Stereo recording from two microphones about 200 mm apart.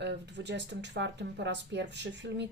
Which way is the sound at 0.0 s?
60° right (ahead or behind).